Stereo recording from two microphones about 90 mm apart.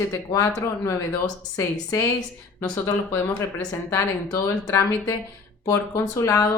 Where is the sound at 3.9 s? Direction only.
40° left (ahead or behind).